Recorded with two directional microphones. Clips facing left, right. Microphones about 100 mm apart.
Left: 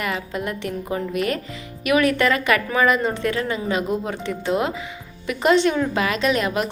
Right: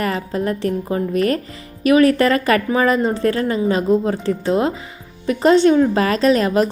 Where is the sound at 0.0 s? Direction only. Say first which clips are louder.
Right 5 dB; 35° right (ahead or behind).